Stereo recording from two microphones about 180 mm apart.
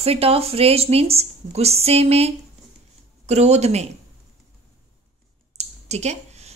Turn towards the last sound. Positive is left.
turn(degrees=-35)  # may be behind; listen again after turning